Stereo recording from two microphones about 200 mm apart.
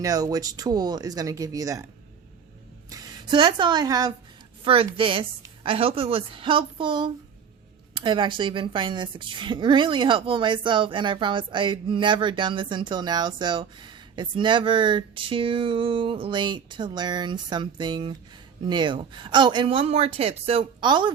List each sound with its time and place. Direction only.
0.0 s a woman's voice: 20° right (ahead or behind)
2.9 s a woman's voice: 20° right (ahead or behind)